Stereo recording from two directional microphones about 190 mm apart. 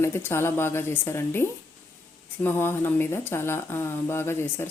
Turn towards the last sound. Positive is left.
turn(degrees=10)  # may be behind; listen again after turning